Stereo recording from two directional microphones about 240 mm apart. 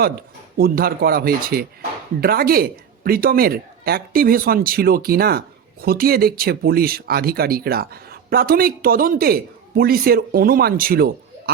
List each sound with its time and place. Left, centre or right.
0.0 s speech: right